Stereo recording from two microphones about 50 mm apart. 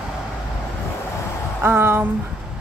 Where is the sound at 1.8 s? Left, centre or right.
Right.